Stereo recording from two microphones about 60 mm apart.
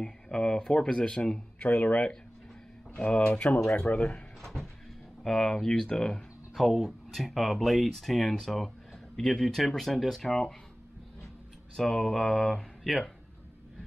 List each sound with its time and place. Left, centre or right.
0.0 s speech: centre
4.4 s music: centre
5.2 s speech: centre
11.7 s speech: centre